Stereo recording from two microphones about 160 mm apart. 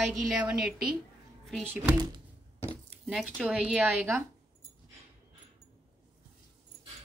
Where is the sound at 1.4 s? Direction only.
Centre (ahead or behind).